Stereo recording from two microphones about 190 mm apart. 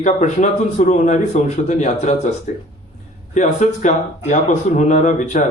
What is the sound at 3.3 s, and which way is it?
Speech, 40° left (ahead or behind).